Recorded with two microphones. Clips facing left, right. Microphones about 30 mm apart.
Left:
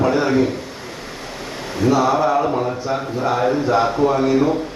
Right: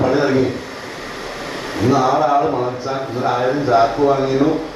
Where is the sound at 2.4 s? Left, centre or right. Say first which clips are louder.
Right 2 dB; centre.